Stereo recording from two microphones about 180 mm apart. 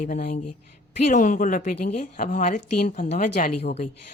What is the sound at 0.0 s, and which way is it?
A woman's voice, 45° left (ahead or behind).